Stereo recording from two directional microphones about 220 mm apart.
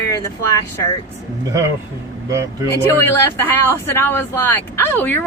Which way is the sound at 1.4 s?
15° right (ahead or behind).